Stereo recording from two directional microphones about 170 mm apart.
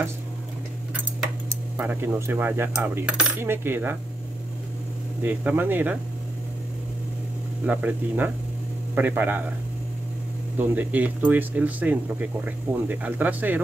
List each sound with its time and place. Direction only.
1.8 s speech: 10° right (ahead or behind)
5.2 s speech: 10° right (ahead or behind)
7.6 s speech: 10° right (ahead or behind)
10.6 s speech: 10° right (ahead or behind)